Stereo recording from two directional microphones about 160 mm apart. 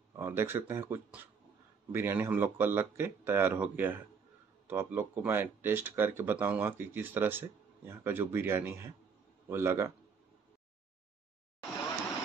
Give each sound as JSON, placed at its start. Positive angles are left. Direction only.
{"t": 0.1, "sound": "speech", "side_deg": -15}